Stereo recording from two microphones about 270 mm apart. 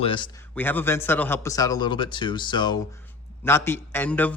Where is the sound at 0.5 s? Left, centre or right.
Centre.